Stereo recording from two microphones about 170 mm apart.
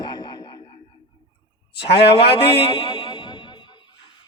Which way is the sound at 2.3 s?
35° left (ahead or behind).